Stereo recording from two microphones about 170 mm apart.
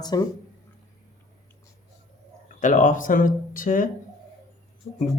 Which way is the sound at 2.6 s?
50° left (ahead or behind).